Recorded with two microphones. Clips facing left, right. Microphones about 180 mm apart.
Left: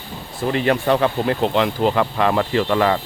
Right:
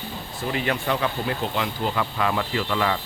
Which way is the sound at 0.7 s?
50° left (ahead or behind).